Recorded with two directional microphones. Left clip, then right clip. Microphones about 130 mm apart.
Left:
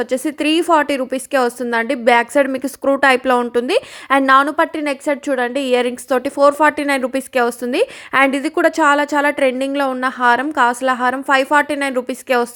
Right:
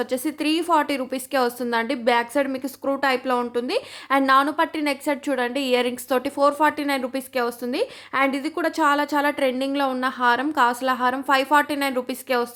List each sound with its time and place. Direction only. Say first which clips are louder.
0.0 s a woman's voice: left 6 dB; 30° left (ahead or behind)